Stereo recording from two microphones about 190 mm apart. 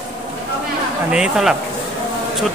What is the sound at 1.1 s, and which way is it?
Speech, 5° right (ahead or behind).